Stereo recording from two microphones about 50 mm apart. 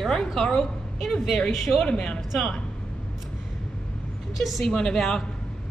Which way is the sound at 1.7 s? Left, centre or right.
Centre.